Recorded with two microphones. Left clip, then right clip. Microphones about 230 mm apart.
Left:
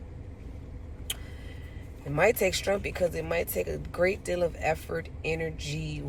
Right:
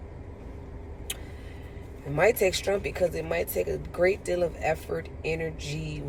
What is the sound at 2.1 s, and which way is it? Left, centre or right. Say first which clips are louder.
Speech: right 1 dB; left.